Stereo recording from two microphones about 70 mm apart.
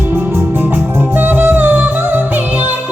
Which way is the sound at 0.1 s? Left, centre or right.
Right.